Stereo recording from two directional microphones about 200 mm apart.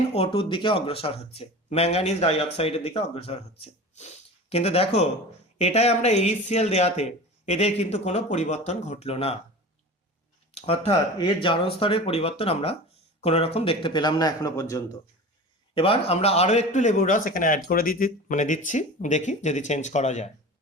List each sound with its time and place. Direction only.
0.1 s a man's voice: 30° left (ahead or behind)
10.5 s speech: 30° left (ahead or behind)
15.7 s a man's voice: 30° left (ahead or behind)